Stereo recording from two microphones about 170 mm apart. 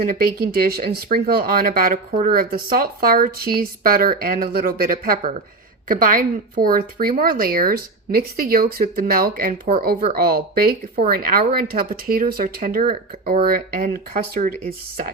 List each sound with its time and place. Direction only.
0.0 s speech: 60° right (ahead or behind)